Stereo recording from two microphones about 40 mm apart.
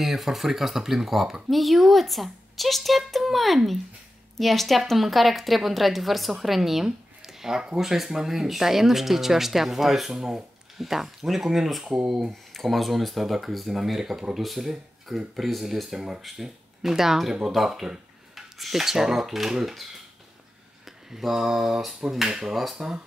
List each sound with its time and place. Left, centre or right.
0.0 s speech: centre
10.1 s speech: centre
11.9 s speech: centre
12.3 s speech: centre